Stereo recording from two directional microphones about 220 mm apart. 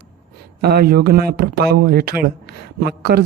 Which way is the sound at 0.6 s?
45° right (ahead or behind).